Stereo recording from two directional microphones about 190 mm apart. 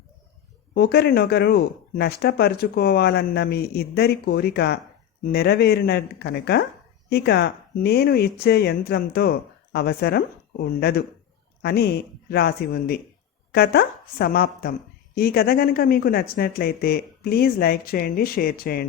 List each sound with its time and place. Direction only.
0.7 s a woman's voice: 55° left (ahead or behind)